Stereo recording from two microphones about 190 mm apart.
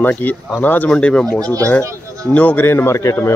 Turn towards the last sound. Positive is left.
turn(degrees=15)  # may be behind; listen again after turning